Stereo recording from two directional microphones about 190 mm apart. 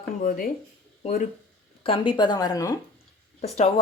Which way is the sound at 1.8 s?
25° left (ahead or behind).